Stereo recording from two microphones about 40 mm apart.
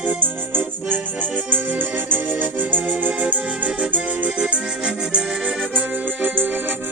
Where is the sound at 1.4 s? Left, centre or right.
Right.